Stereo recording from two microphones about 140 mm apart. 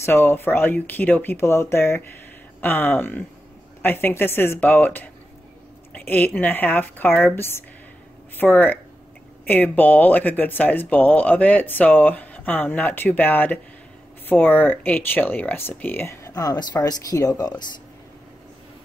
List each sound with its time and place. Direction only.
0.0 s speech: 15° left (ahead or behind)
16.3 s speech: 25° left (ahead or behind)